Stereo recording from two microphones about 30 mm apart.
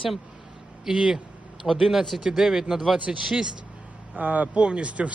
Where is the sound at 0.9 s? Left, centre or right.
Right.